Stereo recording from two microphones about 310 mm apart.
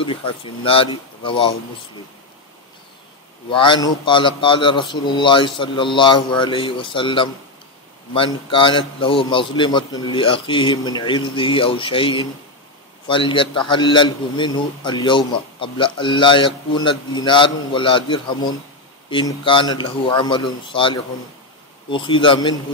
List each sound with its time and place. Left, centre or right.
0.4 s a man's voice: centre
3.4 s a man's voice: centre